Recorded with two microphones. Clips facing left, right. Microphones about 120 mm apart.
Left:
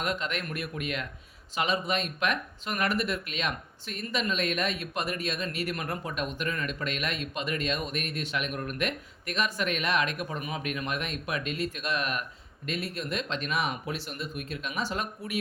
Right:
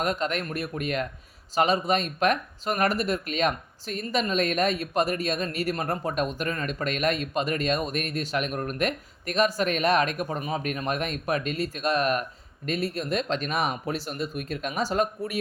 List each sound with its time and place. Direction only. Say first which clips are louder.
0.0 s speech: right 5 dB; 40° right (ahead or behind)